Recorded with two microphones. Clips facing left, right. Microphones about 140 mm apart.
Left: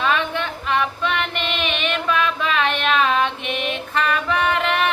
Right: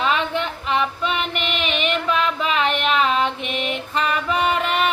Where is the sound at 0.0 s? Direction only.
15° right (ahead or behind).